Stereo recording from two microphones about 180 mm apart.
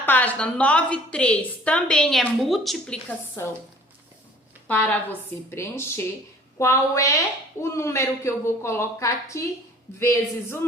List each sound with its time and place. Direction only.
0.0 s a woman's voice: 10° left (ahead or behind)
3.4 s a woman's voice: 15° left (ahead or behind)
4.7 s a woman's voice: 10° left (ahead or behind)